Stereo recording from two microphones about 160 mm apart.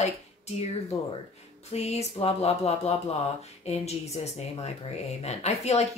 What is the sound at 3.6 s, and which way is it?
Speech, 40° left (ahead or behind).